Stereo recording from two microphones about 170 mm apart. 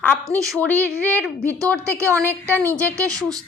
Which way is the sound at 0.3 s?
20° right (ahead or behind).